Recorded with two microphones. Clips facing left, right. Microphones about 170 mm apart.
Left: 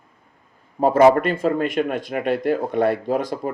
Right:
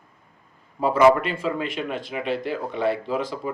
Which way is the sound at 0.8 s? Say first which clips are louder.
Left 3 dB; 50° left (ahead or behind).